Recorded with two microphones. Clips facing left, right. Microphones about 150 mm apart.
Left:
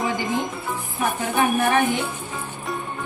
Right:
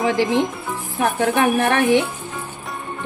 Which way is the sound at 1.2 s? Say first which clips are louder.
Right 3 dB; 75° right (ahead or behind).